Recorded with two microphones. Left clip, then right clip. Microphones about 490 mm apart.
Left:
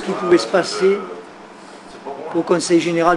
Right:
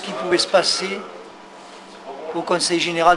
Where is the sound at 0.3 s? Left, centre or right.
Centre.